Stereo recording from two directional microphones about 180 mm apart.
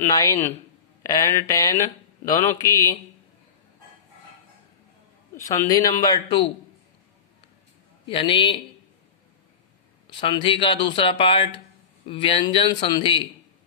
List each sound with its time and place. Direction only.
0.0 s speech: 15° left (ahead or behind)
5.3 s speech: 15° left (ahead or behind)
8.1 s speech: 25° left (ahead or behind)
10.1 s speech: 25° left (ahead or behind)